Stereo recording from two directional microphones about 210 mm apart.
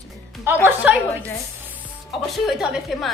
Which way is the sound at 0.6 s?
5° right (ahead or behind).